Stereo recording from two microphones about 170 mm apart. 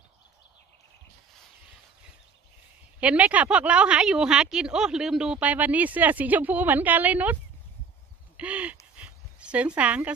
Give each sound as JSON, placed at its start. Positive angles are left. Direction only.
{"t": 3.0, "sound": "speech", "side_deg": -10}
{"t": 8.4, "sound": "speech", "side_deg": -10}
{"t": 8.9, "sound": "a sound", "side_deg": -5}